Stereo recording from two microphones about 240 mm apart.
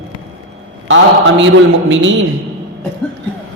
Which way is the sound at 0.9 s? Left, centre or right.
Right.